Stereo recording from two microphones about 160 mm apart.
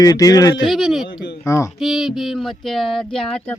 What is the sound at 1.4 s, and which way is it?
Speech, 20° left (ahead or behind).